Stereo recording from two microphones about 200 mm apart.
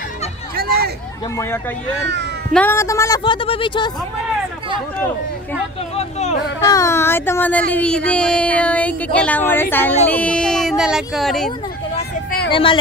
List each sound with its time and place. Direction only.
0.6 s a sound: 50° right (ahead or behind)
2.5 s speech: 10° left (ahead or behind)
5.9 s speech: 35° left (ahead or behind)
6.6 s speech: 15° left (ahead or behind)
12.4 s speech: 25° left (ahead or behind)